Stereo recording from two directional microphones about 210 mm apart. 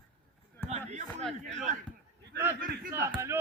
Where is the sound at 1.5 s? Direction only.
35° right (ahead or behind).